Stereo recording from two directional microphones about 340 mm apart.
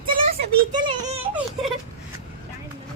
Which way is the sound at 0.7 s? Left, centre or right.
Centre.